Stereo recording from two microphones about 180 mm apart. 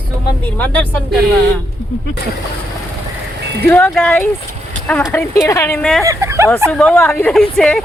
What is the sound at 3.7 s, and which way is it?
Speech, 5° left (ahead or behind).